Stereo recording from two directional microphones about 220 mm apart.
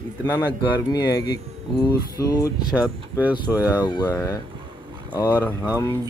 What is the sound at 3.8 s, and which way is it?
Speech, 20° left (ahead or behind).